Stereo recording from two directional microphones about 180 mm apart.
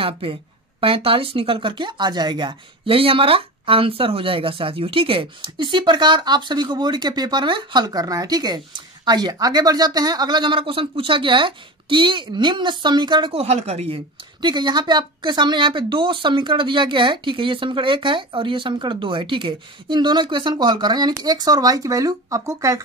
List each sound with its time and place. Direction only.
0.0 s speech: 30° right (ahead or behind)